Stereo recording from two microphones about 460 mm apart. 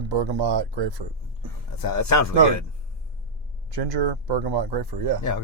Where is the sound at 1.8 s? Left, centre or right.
Left.